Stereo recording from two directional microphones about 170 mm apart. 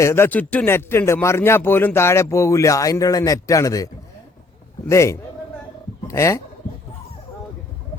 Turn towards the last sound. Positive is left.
turn(degrees=15)  # may be behind; listen again after turning